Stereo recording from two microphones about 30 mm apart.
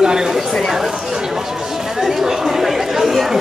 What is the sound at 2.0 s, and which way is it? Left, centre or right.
Chatter, centre.